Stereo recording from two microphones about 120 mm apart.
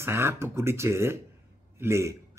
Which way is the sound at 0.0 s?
20° right (ahead or behind).